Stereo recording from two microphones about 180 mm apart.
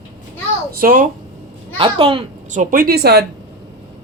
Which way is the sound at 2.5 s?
45° right (ahead or behind).